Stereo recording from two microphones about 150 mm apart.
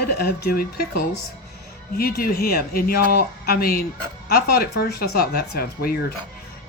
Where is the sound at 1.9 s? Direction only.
85° left.